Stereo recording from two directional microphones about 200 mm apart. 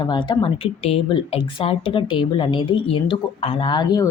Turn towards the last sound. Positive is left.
turn(degrees=20)  # may be behind; listen again after turning